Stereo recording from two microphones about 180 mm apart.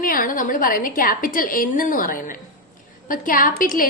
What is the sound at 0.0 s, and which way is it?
A woman's voice, 50° left (ahead or behind).